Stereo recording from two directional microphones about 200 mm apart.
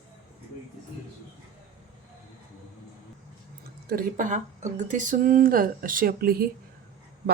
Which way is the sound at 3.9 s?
45° right (ahead or behind).